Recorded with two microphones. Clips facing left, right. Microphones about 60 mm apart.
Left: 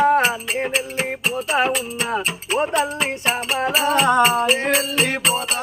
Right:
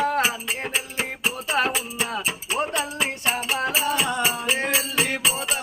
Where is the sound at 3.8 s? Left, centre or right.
Left.